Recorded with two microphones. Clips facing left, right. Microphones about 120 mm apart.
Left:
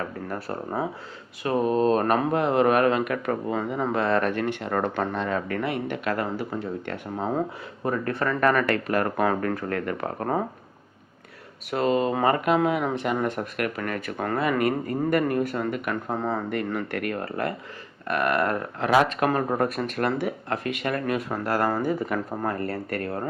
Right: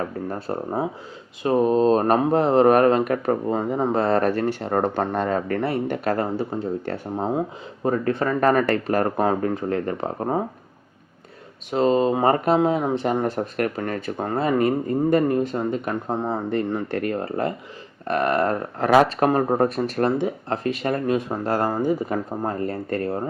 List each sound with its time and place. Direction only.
0.3 s speech: 25° right (ahead or behind)
9.3 s speech: 20° right (ahead or behind)
11.7 s speech: 25° right (ahead or behind)